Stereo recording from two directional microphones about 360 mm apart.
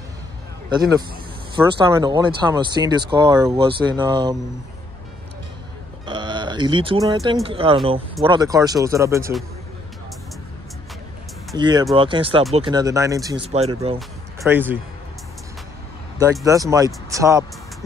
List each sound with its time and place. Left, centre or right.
1.5 s speech: centre
6.0 s speech: centre
11.5 s speech: centre
13.9 s speech: centre
16.2 s speech: centre